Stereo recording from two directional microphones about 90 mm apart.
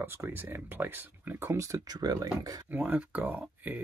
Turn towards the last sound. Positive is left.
turn(degrees=-20)  # may be behind; listen again after turning